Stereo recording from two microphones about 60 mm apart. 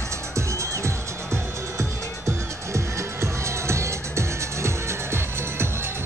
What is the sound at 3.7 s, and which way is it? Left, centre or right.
Music, right.